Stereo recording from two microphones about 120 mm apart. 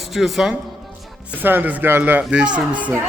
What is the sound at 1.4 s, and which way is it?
Speech, 15° right (ahead or behind).